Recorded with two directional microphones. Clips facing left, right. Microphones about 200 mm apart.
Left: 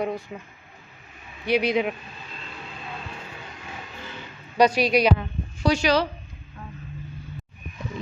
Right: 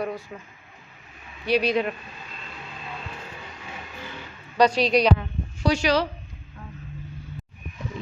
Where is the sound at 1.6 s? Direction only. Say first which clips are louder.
Even; 15° left (ahead or behind).